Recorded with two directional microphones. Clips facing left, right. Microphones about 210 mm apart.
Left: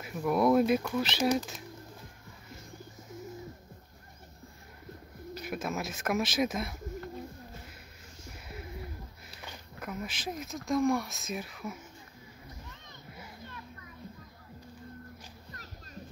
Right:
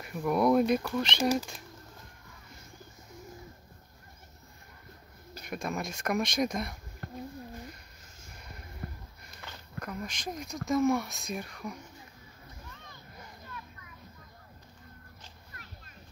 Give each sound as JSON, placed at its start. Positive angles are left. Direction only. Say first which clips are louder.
{"t": 0.0, "sound": "speech", "louder": "even", "side_deg": 0}
{"t": 5.4, "sound": "speech", "louder": "even", "side_deg": 5}
{"t": 8.8, "sound": "sniff", "louder": "right 2 dB", "side_deg": -50}
{"t": 9.4, "sound": "speech", "louder": "right 1 dB", "side_deg": 10}